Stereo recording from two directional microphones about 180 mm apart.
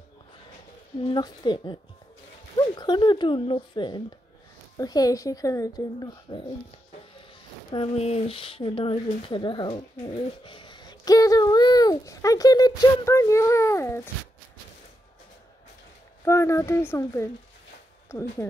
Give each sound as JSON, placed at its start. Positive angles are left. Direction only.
{"t": 1.0, "sound": "speech", "side_deg": 25}
{"t": 7.7, "sound": "speech", "side_deg": 35}
{"t": 16.3, "sound": "speech", "side_deg": 15}